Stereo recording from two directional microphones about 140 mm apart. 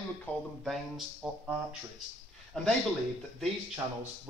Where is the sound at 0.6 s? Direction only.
5° right (ahead or behind).